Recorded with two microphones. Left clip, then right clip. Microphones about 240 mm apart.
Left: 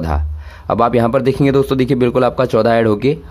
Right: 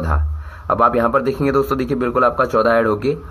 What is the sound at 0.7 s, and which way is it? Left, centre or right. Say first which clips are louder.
Speech: left 1 dB; left.